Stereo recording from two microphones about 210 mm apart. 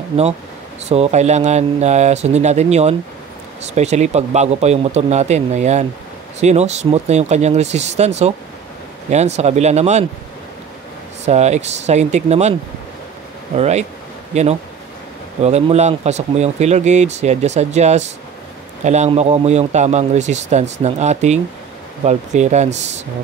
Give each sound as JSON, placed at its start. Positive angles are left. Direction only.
{"t": 0.8, "sound": "speech", "side_deg": -30}
{"t": 11.2, "sound": "speech", "side_deg": -30}
{"t": 13.6, "sound": "speech", "side_deg": -30}